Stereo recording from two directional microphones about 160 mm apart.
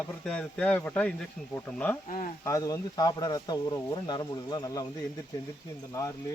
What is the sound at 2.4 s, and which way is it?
Speech, 20° left (ahead or behind).